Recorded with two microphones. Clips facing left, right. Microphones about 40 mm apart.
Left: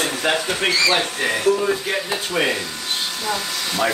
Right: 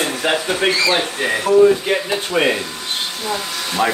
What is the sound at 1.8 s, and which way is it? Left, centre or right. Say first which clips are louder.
Speech: right 4 dB; right.